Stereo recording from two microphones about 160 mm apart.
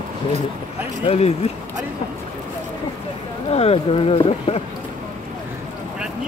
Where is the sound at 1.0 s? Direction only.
40° left (ahead or behind).